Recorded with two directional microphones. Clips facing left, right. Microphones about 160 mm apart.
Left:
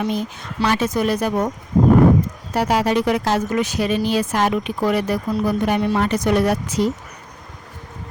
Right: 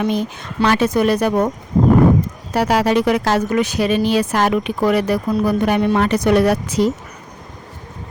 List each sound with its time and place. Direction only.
0.0 s speech: 65° right (ahead or behind)
2.5 s speech: 90° right